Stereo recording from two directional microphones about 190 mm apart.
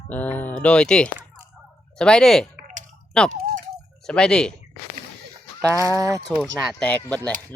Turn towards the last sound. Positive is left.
turn(degrees=5)  # may be behind; listen again after turning